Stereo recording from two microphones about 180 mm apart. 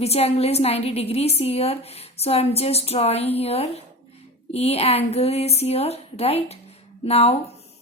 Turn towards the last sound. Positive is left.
turn(degrees=35)  # may be behind; listen again after turning